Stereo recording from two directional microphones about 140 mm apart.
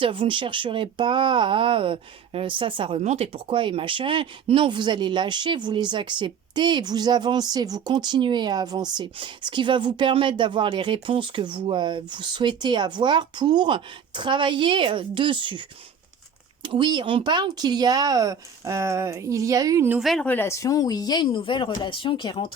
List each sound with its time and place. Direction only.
0.0 s speech: 40° right (ahead or behind)
3.0 s speech: 50° right (ahead or behind)
16.6 s speech: 35° right (ahead or behind)
19.9 s speech: centre (ahead or behind)
20.2 s speech: 15° left (ahead or behind); by 22.4 s 35° left (ahead or behind)